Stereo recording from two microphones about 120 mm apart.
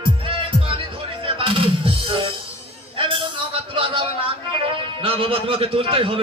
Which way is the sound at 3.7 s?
50° right (ahead or behind).